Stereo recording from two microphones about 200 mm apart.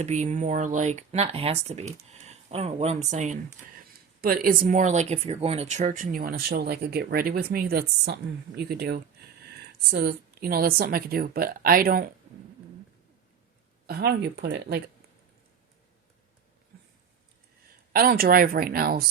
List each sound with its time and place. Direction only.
0.0 s speech: 35° right (ahead or behind)
13.8 s speech: 55° right (ahead or behind)
17.9 s speech: 45° right (ahead or behind)